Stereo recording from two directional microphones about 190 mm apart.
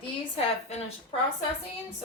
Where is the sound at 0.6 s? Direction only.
35° left (ahead or behind).